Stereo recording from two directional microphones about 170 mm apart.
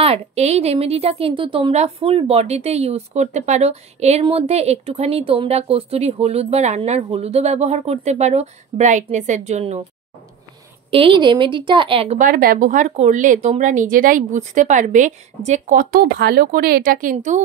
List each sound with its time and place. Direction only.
0.0 s a woman's voice: 35° right (ahead or behind)
10.9 s a woman's voice: 30° right (ahead or behind)
12.2 s speech: 55° right (ahead or behind)